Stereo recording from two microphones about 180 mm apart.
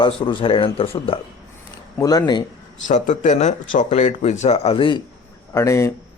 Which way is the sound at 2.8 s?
45° left (ahead or behind).